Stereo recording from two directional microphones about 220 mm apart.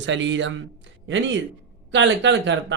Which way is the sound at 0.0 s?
55° right (ahead or behind).